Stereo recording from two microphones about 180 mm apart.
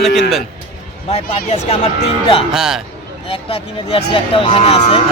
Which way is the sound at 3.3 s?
30° left (ahead or behind).